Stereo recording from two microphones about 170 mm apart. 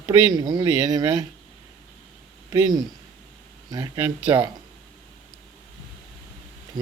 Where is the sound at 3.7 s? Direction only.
20° right (ahead or behind).